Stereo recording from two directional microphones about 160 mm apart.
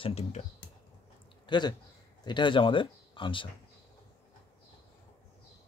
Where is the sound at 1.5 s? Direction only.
25° left (ahead or behind).